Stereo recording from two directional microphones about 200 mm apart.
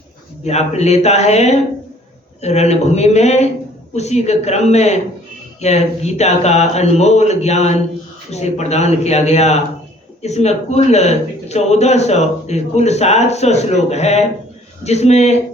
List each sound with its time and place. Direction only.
0.4 s a man's voice: 35° left (ahead or behind)